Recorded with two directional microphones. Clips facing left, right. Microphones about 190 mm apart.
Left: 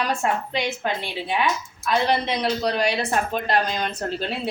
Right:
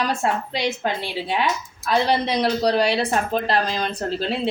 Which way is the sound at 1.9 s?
35° right (ahead or behind).